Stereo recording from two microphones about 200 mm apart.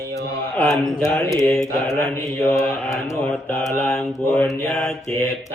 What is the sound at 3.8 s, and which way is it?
Speech, 5° left (ahead or behind).